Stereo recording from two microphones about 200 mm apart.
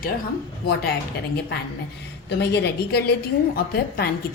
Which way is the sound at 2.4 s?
55° left (ahead or behind).